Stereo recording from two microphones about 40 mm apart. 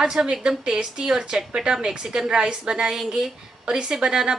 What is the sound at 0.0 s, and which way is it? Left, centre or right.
A woman's voice, centre.